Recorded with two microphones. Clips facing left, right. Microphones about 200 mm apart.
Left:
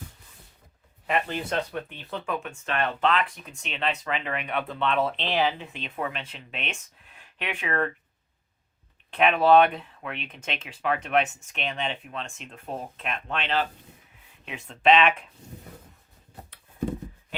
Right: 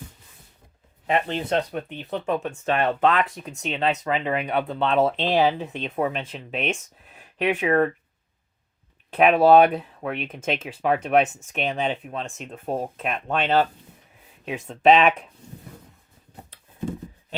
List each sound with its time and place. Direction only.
1.0 s speech: 35° right (ahead or behind)
2.7 s speech: 45° right (ahead or behind)
9.0 s speech: 40° right (ahead or behind)